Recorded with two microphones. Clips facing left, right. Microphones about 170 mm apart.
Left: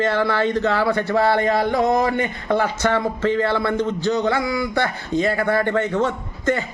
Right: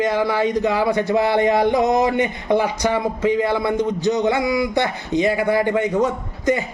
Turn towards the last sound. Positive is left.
turn(degrees=-10)  # may be behind; listen again after turning